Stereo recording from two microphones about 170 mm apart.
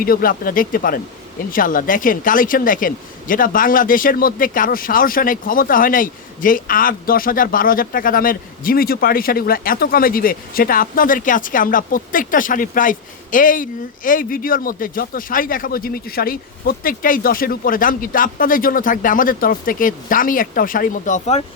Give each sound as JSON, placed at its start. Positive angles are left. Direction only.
{"t": 0.0, "sound": "speech", "side_deg": 60}